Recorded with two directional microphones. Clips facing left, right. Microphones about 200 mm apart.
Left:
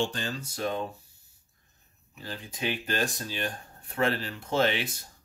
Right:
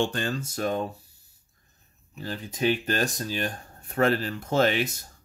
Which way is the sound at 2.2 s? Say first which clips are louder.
Right 7 dB; 45° right (ahead or behind).